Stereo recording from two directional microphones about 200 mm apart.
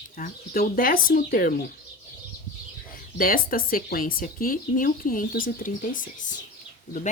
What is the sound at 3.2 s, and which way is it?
Speech, 45° left (ahead or behind).